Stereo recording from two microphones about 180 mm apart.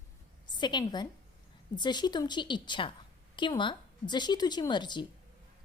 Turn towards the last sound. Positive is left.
turn(degrees=25)  # may be behind; listen again after turning